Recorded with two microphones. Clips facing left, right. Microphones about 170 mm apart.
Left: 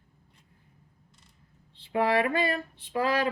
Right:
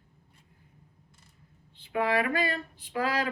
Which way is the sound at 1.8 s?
30° left (ahead or behind).